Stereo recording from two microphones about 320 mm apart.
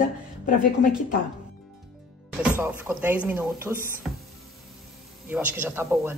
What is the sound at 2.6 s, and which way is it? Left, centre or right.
Speech, centre.